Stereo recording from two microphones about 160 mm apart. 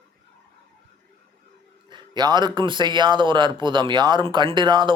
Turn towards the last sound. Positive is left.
turn(degrees=-30)  # may be behind; listen again after turning